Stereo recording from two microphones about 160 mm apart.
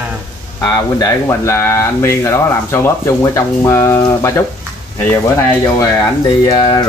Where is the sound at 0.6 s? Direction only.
20° left (ahead or behind).